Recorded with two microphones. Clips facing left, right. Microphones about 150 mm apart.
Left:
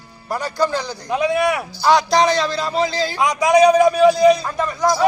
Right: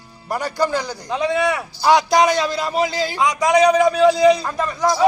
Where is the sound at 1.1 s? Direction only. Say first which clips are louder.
Left 2 dB; 5° left (ahead or behind).